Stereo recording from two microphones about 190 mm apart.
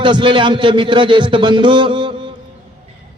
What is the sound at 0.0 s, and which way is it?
A man's voice, 25° right (ahead or behind).